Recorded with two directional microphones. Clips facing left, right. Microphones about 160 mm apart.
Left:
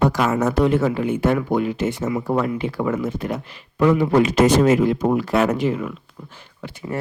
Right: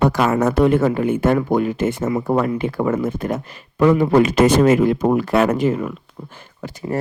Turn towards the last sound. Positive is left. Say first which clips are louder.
# right 4 dB
turn(degrees=-40)  # may be behind; listen again after turning